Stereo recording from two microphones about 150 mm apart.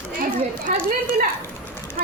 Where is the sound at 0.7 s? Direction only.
65° right (ahead or behind).